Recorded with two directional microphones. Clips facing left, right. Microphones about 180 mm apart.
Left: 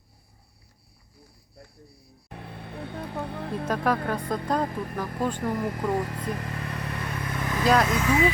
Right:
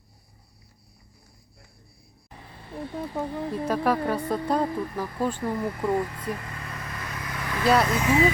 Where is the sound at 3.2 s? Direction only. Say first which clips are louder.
Right 3 dB; 65° left (ahead or behind).